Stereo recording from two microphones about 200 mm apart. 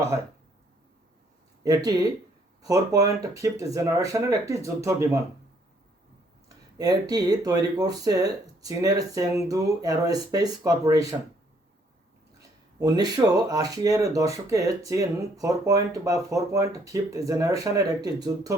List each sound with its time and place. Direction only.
1.6 s speech: 20° right (ahead or behind)
6.7 s speech: 20° right (ahead or behind)
12.4 s speech: 20° right (ahead or behind)